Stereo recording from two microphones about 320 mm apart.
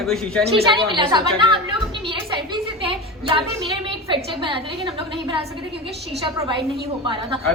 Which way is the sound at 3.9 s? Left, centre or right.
Centre.